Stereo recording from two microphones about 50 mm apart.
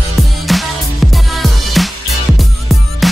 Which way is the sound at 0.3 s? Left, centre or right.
Centre.